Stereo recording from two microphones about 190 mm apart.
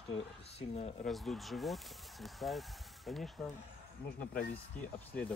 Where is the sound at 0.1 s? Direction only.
30° left (ahead or behind).